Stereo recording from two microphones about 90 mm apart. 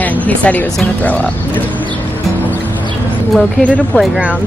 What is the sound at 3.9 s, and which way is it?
Speech, 20° left (ahead or behind).